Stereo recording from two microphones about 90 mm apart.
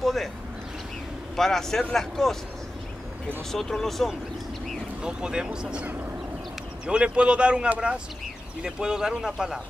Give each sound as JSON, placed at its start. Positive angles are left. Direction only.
{"t": 0.0, "sound": "speech", "side_deg": 0}
{"t": 1.3, "sound": "speech", "side_deg": 5}
{"t": 3.5, "sound": "speech", "side_deg": 5}
{"t": 5.0, "sound": "speech", "side_deg": -10}